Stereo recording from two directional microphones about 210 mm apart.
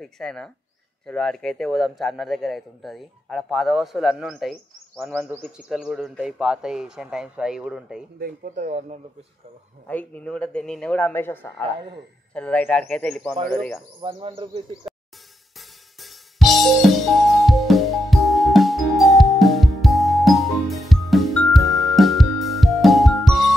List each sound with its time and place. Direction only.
0.0 s speech: centre (ahead or behind)
8.2 s speech: 35° right (ahead or behind)
9.8 s a man's voice: 5° left (ahead or behind)
14.0 s speech: 25° right (ahead or behind)
16.0 s music: centre (ahead or behind)